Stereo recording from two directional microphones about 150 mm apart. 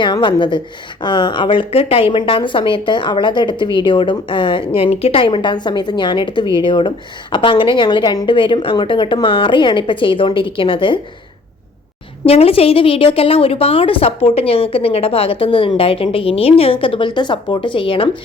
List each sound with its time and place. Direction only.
0.0 s a woman's voice: 30° left (ahead or behind)
12.2 s a woman's voice: 40° left (ahead or behind)